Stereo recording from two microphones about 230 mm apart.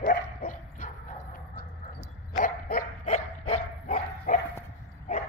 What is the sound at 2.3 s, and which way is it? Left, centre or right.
Dog, left.